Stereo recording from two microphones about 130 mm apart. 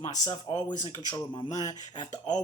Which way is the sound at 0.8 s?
30° right (ahead or behind).